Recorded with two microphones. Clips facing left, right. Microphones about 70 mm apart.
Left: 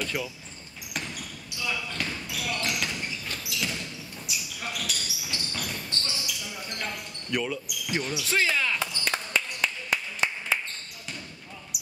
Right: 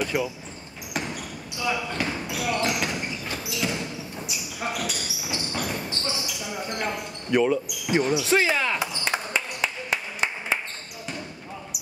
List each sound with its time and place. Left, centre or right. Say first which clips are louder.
0.0 s speech: right 6 dB; centre
0.9 s basketball bounce: right 5 dB; centre
4.6 s speech: right 8 dB; right
4.9 s basketball bounce: right 4 dB; centre
6.0 s speech: right 5 dB; right
8.2 s basketball bounce: right 4 dB; centre